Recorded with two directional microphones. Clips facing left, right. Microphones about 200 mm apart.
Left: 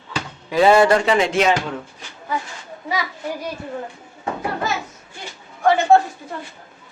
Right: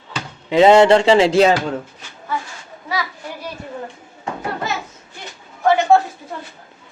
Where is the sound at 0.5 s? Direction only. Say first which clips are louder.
Right 4 dB; 20° right (ahead or behind).